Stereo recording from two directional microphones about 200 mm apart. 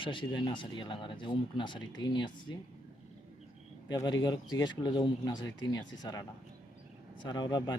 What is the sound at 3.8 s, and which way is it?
Speech, 20° left (ahead or behind).